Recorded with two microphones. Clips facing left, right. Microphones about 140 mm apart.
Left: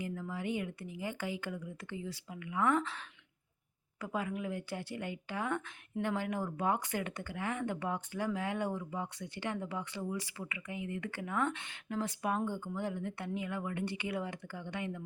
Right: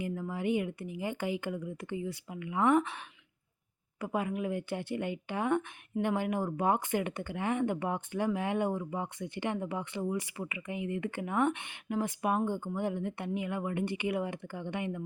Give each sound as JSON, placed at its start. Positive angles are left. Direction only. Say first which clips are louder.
{"t": 0.0, "sound": "speech", "louder": "right 5 dB", "side_deg": -20}
{"t": 4.0, "sound": "speech", "louder": "right 4 dB", "side_deg": -20}